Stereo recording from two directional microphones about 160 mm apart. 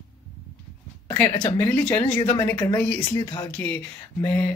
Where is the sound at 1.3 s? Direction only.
30° left (ahead or behind).